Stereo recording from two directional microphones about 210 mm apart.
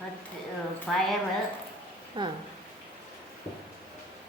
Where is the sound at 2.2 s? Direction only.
25° right (ahead or behind).